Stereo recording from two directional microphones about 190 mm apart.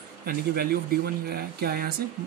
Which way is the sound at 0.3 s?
55° right (ahead or behind).